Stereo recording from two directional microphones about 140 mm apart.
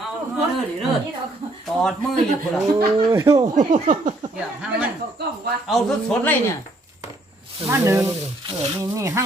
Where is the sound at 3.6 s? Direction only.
65° right (ahead or behind).